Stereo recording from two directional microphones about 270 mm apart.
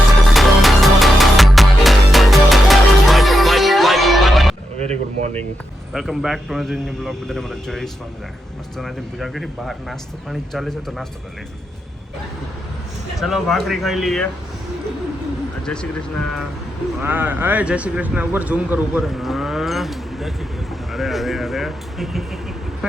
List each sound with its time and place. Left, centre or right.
0.3 s music: centre
4.8 s a sound: right
5.9 s a man's voice: centre
13.1 s a man's voice: centre
15.6 s a man's voice: centre
17.0 s a man's voice: centre